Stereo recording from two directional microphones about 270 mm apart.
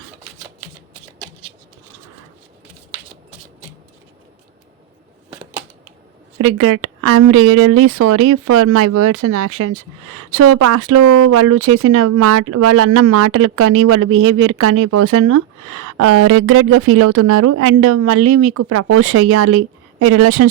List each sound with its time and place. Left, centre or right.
6.4 s a woman's voice: right